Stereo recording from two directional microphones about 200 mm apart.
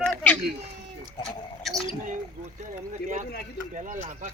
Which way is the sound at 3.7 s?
40° right (ahead or behind).